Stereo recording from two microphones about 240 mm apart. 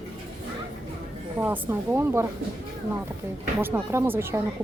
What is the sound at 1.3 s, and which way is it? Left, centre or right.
Speech, centre.